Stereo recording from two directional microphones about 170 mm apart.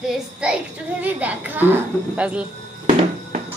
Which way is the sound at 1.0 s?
10° right (ahead or behind).